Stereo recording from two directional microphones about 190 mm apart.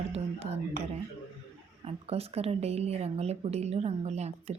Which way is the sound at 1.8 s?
30° right (ahead or behind).